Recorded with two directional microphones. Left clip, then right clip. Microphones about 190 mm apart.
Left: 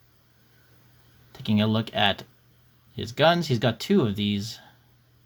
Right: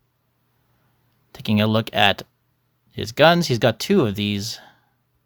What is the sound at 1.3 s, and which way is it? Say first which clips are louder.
Speech: right 5 dB; 40° right (ahead or behind).